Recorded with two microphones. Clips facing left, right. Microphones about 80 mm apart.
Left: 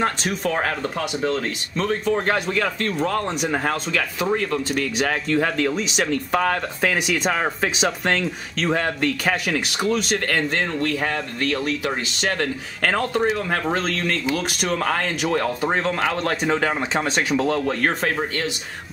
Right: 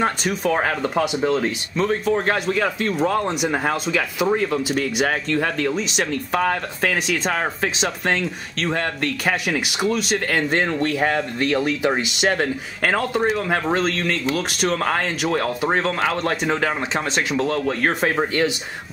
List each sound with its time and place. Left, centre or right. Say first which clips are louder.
0.0 s speech: right 2 dB; centre
1.8 s speech: right 2 dB; centre
10.5 s speech: right 3 dB; right; by 17.9 s centre